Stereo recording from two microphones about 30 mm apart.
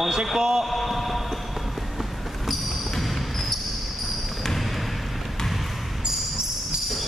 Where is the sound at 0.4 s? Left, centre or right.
Right.